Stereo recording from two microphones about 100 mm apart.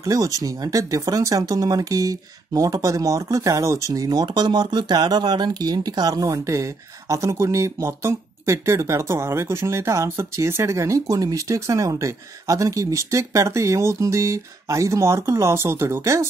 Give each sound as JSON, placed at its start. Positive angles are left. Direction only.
{"t": 0.0, "sound": "speech", "side_deg": -35}